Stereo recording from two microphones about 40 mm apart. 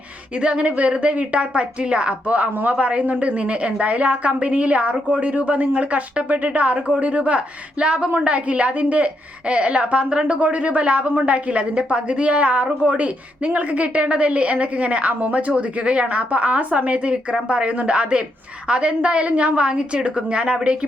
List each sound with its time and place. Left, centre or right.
0.3 s a woman's voice: right